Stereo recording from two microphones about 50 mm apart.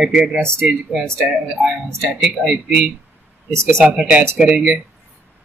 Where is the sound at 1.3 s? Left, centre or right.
Centre.